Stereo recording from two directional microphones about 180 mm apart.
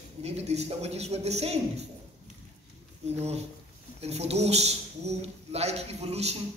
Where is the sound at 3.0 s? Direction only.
35° right (ahead or behind).